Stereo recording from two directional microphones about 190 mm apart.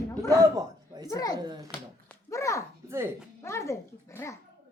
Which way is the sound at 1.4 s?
20° right (ahead or behind).